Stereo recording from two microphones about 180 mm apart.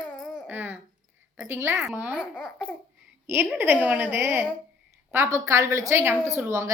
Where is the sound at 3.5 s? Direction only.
10° right (ahead or behind).